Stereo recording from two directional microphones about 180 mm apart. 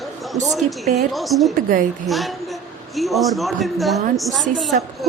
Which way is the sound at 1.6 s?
50° right (ahead or behind).